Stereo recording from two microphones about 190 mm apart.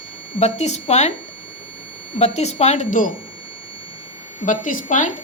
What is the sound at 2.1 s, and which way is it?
Speech, 35° left (ahead or behind).